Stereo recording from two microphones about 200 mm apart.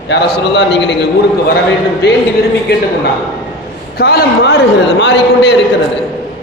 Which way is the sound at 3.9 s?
50° left (ahead or behind).